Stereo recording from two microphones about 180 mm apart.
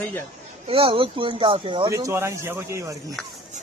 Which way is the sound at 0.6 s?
30° right (ahead or behind).